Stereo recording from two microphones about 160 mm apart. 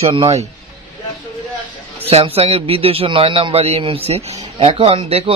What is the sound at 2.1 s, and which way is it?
A man's voice, 40° right (ahead or behind).